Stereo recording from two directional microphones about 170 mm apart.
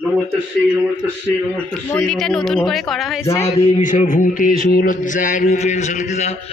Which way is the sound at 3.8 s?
50° left (ahead or behind).